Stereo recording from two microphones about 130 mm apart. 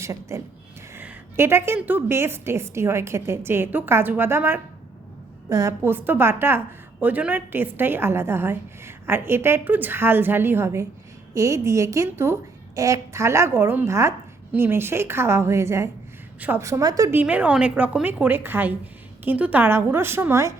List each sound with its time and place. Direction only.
0.0 s a woman's voice: 25° right (ahead or behind)